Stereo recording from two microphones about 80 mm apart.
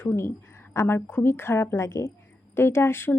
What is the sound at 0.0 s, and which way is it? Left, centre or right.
A woman's voice, left.